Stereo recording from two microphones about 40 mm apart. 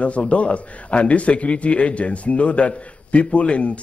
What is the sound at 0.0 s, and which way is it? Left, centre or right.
A man's voice, left.